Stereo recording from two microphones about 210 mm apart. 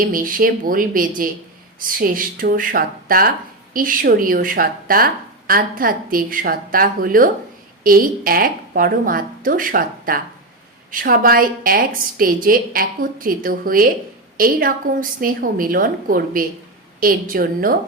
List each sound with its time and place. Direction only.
0.0 s a woman's voice: 40° right (ahead or behind)